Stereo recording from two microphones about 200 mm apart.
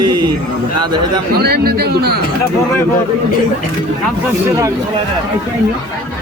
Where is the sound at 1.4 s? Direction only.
50° right (ahead or behind).